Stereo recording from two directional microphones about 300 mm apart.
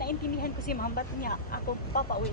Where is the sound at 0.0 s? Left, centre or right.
Left.